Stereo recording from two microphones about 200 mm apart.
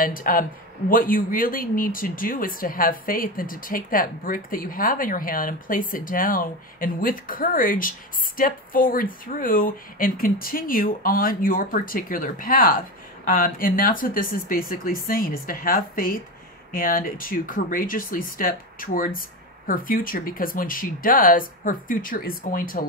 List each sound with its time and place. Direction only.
0.0 s speech: 45° left (ahead or behind)